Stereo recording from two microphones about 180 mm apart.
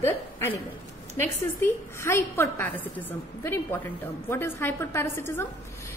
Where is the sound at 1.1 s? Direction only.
15° left (ahead or behind).